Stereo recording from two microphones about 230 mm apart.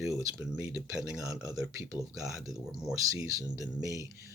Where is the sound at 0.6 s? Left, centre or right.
Centre.